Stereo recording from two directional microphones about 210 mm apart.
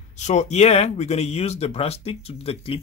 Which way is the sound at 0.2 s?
35° left (ahead or behind).